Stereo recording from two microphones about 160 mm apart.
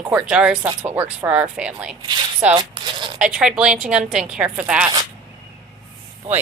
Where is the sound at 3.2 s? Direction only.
5° right (ahead or behind).